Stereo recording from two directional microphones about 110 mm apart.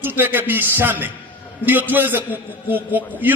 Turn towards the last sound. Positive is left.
turn(degrees=-15)  # may be behind; listen again after turning